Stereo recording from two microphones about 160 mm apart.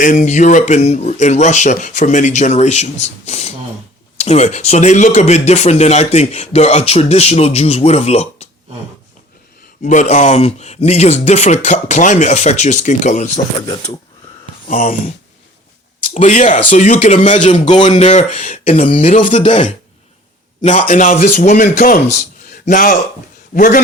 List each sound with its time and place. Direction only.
0.0 s speech: 50° left (ahead or behind)
9.8 s speech: 50° left (ahead or behind)
14.7 s a man's voice: 55° left (ahead or behind)
16.1 s a man's voice: 50° left (ahead or behind)
21.9 s a man's voice: 45° left (ahead or behind)